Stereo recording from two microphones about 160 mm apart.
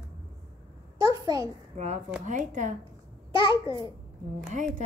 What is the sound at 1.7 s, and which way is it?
A woman's voice, 45° right (ahead or behind).